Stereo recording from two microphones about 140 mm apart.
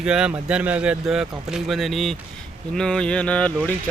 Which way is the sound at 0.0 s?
5° right (ahead or behind).